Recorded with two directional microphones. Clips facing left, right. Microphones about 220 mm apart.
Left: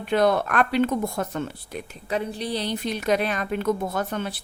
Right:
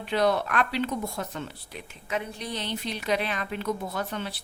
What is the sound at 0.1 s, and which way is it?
A woman's voice, 50° left (ahead or behind).